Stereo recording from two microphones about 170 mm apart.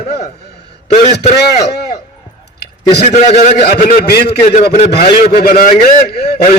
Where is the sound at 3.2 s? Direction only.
40° left (ahead or behind).